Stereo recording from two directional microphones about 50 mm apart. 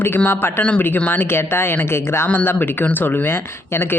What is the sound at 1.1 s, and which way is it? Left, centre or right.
Speech, left.